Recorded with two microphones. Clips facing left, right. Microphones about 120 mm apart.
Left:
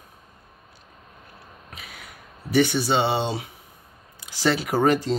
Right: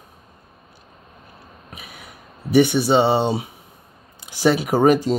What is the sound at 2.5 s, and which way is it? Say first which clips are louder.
Speech: right 5 dB; 15° right (ahead or behind).